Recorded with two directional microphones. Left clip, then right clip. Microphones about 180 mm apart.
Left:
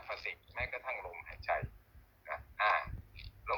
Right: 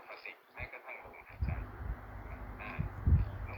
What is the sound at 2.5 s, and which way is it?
Frog, 70° left (ahead or behind).